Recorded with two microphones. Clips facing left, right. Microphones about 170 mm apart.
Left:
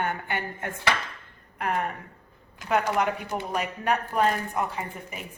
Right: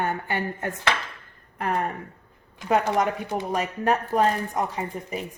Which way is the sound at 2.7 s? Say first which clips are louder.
Right 2 dB; 35° right (ahead or behind).